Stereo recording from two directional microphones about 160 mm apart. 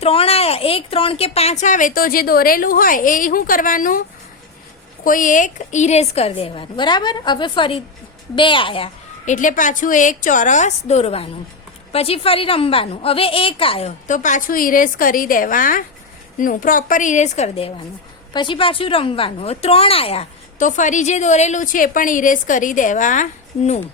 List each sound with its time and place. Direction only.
0.0 s a woman's voice: 40° left (ahead or behind); by 4.0 s 60° left (ahead or behind)
5.0 s a woman's voice: 55° left (ahead or behind); by 8.9 s 35° left (ahead or behind)
9.2 s a woman's voice: 50° left (ahead or behind); by 13.9 s 35° left (ahead or behind)
14.1 s a woman's voice: 50° left (ahead or behind)
20.6 s a woman's voice: 50° left (ahead or behind)